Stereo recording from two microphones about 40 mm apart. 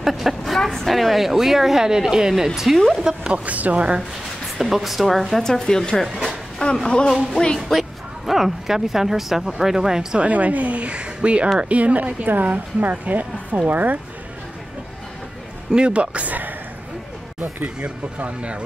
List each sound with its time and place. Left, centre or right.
0.0 s a woman's voice: centre
3.0 s a woman's voice: centre
3.4 s a woman's voice: right
4.6 s speech: centre
5.4 s speech: centre
7.5 s a woman's voice: centre
10.1 s a woman's voice: right
15.7 s speech: right
17.7 s a woman's voice: right